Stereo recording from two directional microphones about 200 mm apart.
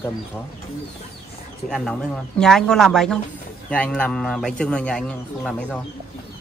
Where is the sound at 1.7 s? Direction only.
5° left (ahead or behind).